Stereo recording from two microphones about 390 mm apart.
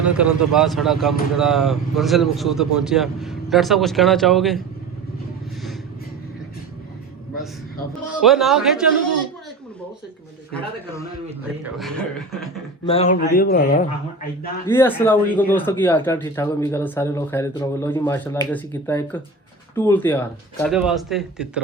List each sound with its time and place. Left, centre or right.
0.0 s speech: centre
8.2 s speech: centre
11.4 s speech: centre
12.8 s speech: centre
14.7 s speech: centre